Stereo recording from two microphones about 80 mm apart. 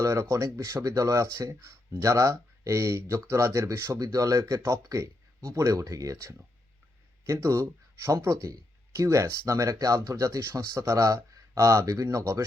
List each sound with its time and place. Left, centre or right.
0.0 s speech: right